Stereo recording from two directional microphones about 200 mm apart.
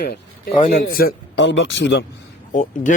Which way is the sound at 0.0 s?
55° left (ahead or behind).